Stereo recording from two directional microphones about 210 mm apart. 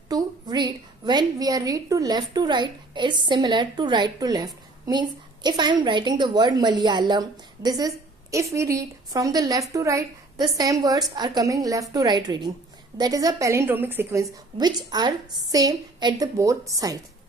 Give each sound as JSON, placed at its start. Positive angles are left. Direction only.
{"t": 0.1, "sound": "a woman's voice", "side_deg": -20}